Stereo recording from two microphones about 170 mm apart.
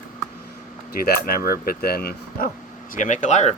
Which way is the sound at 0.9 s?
60° left (ahead or behind).